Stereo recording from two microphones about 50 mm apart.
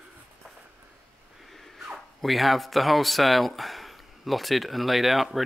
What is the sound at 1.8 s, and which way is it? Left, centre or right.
Speech, centre.